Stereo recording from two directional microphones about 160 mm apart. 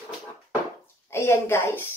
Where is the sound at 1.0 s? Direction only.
15° left (ahead or behind).